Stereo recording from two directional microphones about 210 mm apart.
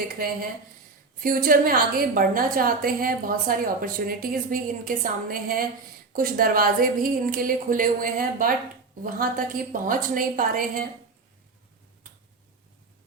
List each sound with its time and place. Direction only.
1.2 s a woman's voice: 45° right (ahead or behind)